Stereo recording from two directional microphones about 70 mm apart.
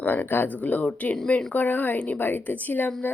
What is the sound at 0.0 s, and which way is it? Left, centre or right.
Speech, left.